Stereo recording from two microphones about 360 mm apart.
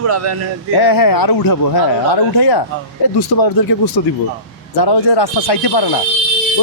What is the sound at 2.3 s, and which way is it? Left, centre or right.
Speech, left.